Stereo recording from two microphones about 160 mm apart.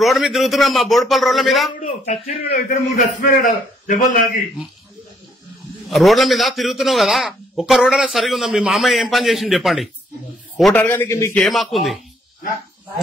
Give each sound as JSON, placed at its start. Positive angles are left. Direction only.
{"t": 0.0, "sound": "a man's voice", "side_deg": 0}
{"t": 1.8, "sound": "speech", "side_deg": 45}
{"t": 2.7, "sound": "a man's voice", "side_deg": 60}
{"t": 5.9, "sound": "a man's voice", "side_deg": 0}
{"t": 10.6, "sound": "a man's voice", "side_deg": 10}
{"t": 11.3, "sound": "a man's voice", "side_deg": 0}